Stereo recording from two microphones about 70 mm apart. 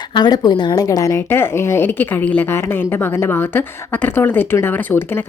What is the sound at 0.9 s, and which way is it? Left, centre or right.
Speech, left.